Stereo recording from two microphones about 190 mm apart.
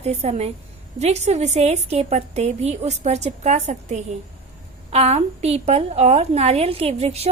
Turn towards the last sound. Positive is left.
turn(degrees=-30)  # may be behind; listen again after turning